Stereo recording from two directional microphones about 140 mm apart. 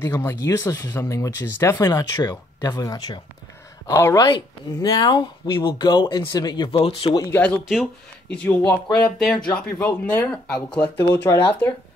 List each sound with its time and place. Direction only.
0.0 s speech: 20° left (ahead or behind); by 7.2 s 40° left (ahead or behind)
7.2 s speech: 15° left (ahead or behind)
7.6 s speech: centre (ahead or behind)
11.0 s speech: 30° left (ahead or behind)